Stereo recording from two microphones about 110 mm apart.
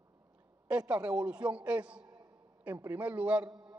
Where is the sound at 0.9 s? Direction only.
15° right (ahead or behind).